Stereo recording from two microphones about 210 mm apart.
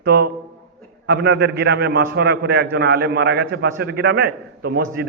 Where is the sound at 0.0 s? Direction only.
50° right (ahead or behind).